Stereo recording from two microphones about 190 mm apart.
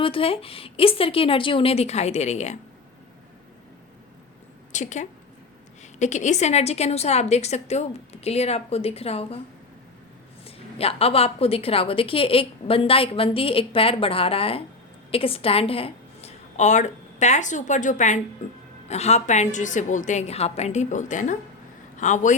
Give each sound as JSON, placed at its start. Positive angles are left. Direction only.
{"t": 0.0, "sound": "a woman's voice", "side_deg": 30}
{"t": 4.7, "sound": "a woman's voice", "side_deg": 40}
{"t": 10.4, "sound": "a woman's voice", "side_deg": 30}